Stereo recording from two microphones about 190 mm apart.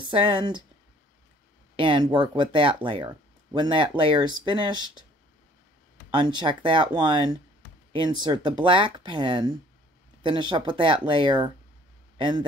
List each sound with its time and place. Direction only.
0.0 s speech: 25° right (ahead or behind)
1.8 s speech: 25° right (ahead or behind)
6.1 s speech: 25° right (ahead or behind)